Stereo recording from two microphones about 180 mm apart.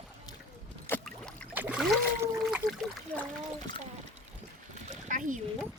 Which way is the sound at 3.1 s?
10° left (ahead or behind).